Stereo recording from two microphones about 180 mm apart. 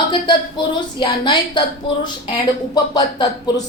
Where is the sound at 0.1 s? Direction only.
25° left (ahead or behind).